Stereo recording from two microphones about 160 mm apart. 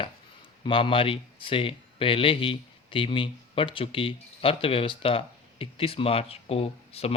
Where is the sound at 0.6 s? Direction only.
35° left (ahead or behind).